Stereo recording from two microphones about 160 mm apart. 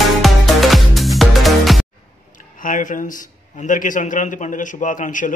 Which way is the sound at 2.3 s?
55° left (ahead or behind).